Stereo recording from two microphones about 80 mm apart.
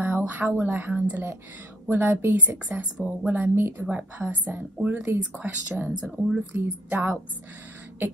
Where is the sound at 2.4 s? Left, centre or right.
Centre.